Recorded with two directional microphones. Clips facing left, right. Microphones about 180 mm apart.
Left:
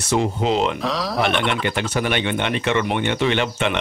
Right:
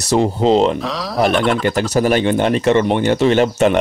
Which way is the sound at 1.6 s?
40° right (ahead or behind).